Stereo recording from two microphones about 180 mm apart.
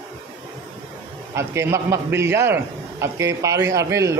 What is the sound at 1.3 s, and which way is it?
A man's voice, 15° right (ahead or behind).